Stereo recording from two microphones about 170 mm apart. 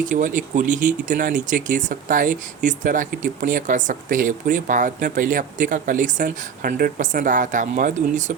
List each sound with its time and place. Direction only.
0.0 s speech: 50° right (ahead or behind)